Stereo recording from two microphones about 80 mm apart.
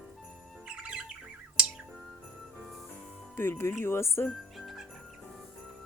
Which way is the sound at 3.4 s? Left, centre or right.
Left.